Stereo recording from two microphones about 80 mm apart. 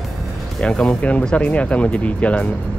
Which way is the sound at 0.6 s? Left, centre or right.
Centre.